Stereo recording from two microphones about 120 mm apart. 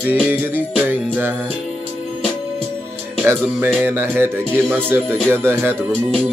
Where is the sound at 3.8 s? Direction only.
15° right (ahead or behind).